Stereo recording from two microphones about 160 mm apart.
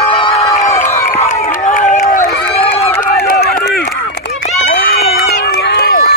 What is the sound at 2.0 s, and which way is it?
Run, 60° left (ahead or behind).